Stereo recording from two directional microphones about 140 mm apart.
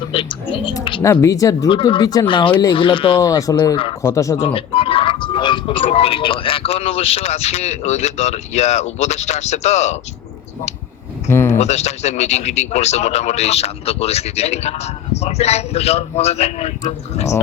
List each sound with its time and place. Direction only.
0.1 s speech: 40° left (ahead or behind)
1.0 s speech: 20° left (ahead or behind)
1.7 s speech: 35° left (ahead or behind)
3.2 s speech: 25° left (ahead or behind)
4.4 s speech: 40° left (ahead or behind)
11.3 s a sound: 20° left (ahead or behind)
11.5 s speech: 55° left (ahead or behind)